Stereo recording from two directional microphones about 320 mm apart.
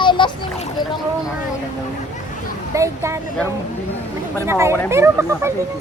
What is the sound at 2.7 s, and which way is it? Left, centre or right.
Speech, centre.